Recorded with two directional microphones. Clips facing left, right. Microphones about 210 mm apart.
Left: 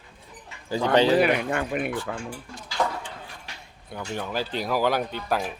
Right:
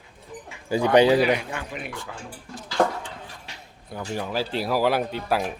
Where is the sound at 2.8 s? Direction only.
55° right (ahead or behind).